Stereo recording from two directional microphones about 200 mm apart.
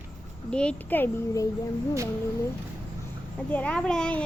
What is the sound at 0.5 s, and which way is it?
Speech, 5° left (ahead or behind).